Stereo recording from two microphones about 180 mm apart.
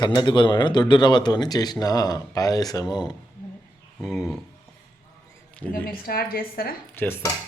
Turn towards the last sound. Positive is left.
turn(degrees=10)  # may be behind; listen again after turning